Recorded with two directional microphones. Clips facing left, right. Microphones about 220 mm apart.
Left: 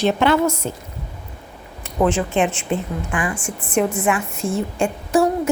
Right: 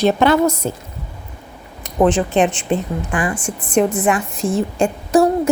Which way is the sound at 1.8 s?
35° right (ahead or behind).